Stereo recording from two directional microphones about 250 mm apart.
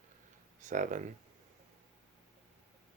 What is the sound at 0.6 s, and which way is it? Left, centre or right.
Speech, right.